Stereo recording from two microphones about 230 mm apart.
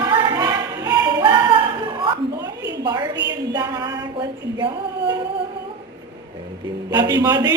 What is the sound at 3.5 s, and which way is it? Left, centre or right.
Music, centre.